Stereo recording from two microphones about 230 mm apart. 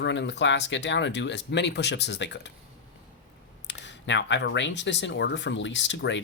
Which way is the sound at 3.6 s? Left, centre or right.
Left.